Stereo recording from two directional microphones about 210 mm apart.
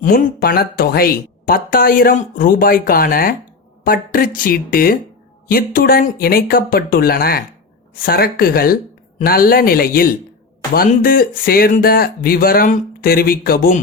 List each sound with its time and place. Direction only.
0.0 s speech: 45° left (ahead or behind)